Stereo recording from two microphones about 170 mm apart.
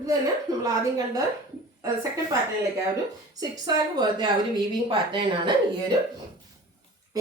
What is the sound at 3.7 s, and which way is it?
Speech, 25° right (ahead or behind).